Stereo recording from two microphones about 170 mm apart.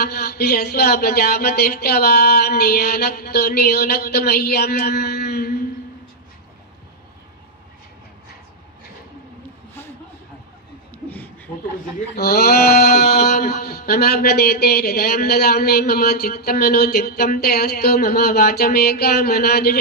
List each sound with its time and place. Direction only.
0.0 s speech: 70° left (ahead or behind)
12.2 s speech: 70° left (ahead or behind)